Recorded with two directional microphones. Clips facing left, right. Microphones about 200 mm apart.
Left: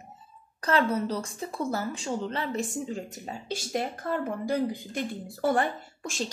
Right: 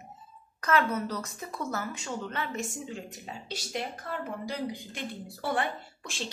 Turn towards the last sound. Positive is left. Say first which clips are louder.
# left 6 dB
turn(degrees=45)  # may be behind; listen again after turning